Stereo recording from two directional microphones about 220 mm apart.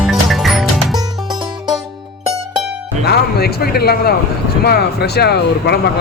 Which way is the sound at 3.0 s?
45° left (ahead or behind).